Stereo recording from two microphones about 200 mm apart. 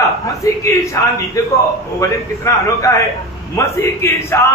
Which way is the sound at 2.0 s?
15° left (ahead or behind).